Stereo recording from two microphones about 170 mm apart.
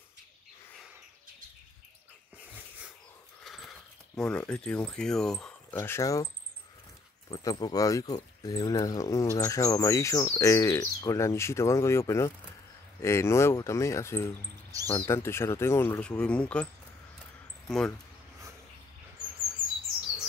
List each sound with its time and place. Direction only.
2.3 s dog: 10° right (ahead or behind)
3.4 s mechanisms: centre (ahead or behind)
4.2 s speech: 5° left (ahead or behind)
5.8 s speech: 15° left (ahead or behind)
7.2 s speech: 20° left (ahead or behind)
17.6 s speech: 5° left (ahead or behind)